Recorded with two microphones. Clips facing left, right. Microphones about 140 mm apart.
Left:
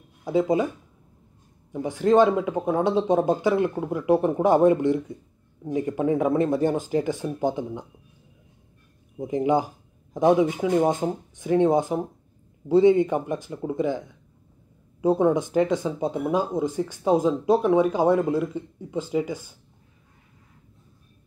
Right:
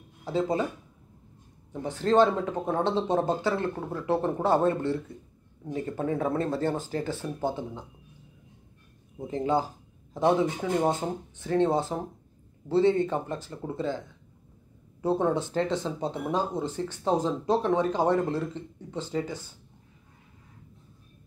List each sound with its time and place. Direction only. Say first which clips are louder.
0.2 s speech: left 5 dB; 15° left (ahead or behind)
1.7 s speech: left 5 dB; 10° left (ahead or behind)
9.3 s speech: left 4 dB; 15° left (ahead or behind)